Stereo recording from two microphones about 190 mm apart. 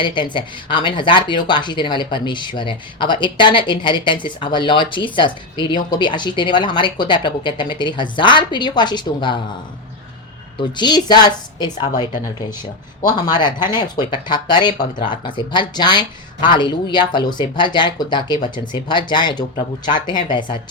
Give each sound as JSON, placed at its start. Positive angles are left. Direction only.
{"t": 0.0, "sound": "speech", "side_deg": 25}
{"t": 10.6, "sound": "speech", "side_deg": 25}